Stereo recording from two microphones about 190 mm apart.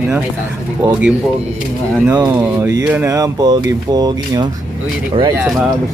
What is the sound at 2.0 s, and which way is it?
Speech, 10° right (ahead or behind).